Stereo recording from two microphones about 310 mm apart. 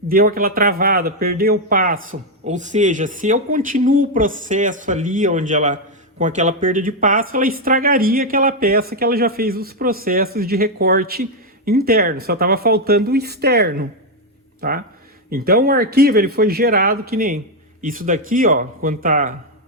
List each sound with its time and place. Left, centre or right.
0.1 s speech: right